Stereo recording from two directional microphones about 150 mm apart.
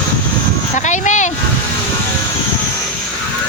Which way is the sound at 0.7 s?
55° left (ahead or behind).